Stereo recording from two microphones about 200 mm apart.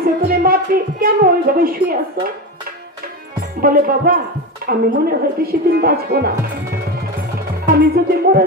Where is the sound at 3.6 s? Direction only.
45° right (ahead or behind).